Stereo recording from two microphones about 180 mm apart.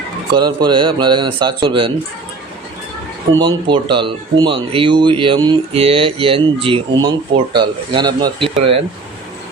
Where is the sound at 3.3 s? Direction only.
25° right (ahead or behind).